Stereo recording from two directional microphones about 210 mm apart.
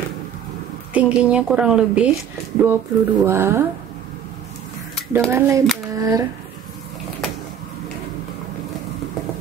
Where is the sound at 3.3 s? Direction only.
10° right (ahead or behind).